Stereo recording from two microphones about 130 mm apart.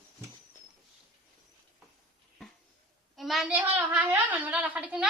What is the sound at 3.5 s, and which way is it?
A woman's voice, 10° right (ahead or behind).